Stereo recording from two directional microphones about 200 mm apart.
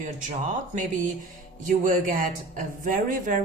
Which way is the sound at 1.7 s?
40° right (ahead or behind).